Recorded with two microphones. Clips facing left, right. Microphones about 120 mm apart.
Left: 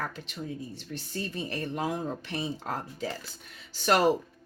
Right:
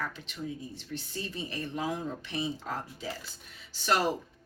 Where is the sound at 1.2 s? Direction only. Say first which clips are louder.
Left 4 dB; 45° left (ahead or behind).